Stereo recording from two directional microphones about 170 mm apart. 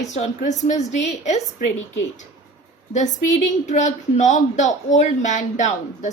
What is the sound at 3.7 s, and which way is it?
Speech, 45° left (ahead or behind).